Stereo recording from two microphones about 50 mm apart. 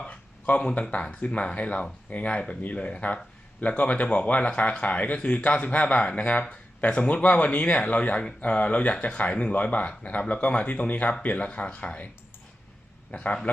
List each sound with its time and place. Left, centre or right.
0.1 s speech: left
13.1 s a man's voice: left